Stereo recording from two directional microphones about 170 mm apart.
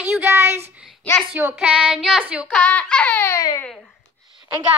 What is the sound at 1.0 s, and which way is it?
Speech, 5° left (ahead or behind).